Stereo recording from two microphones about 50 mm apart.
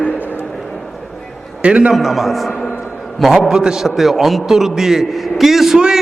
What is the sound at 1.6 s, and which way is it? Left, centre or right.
Speech, right.